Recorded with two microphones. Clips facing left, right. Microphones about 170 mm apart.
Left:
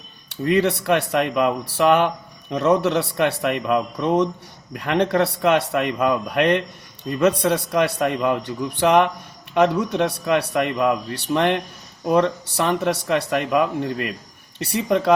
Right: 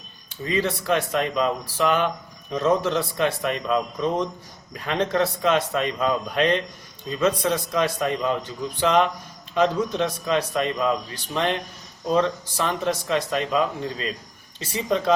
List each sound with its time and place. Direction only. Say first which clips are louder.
0.3 s speech: left 6 dB; 70° left (ahead or behind)